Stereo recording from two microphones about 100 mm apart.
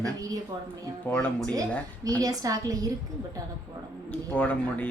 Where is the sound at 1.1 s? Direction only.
15° left (ahead or behind).